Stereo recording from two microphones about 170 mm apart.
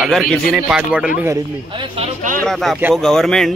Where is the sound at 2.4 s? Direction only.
Centre (ahead or behind).